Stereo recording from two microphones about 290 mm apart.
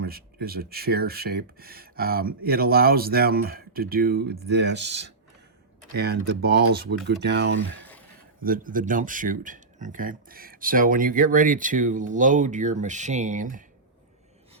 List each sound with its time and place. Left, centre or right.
0.0 s speech: right